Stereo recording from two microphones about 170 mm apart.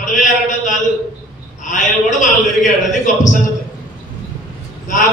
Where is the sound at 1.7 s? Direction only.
50° left (ahead or behind).